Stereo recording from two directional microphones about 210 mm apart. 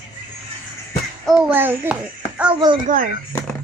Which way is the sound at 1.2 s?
Centre (ahead or behind).